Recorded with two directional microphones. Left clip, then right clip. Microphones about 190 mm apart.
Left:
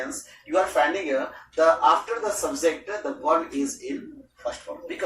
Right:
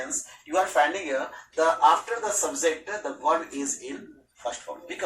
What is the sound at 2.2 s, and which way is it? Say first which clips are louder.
Speech: left 2 dB; centre (ahead or behind).